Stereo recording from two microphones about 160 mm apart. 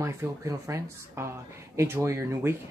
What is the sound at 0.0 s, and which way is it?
Speech, 20° right (ahead or behind).